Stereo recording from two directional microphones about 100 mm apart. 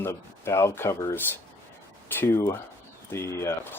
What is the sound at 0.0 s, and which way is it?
Speech, 25° left (ahead or behind).